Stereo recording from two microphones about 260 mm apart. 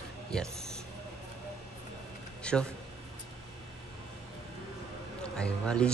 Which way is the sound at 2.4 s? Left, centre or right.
Centre.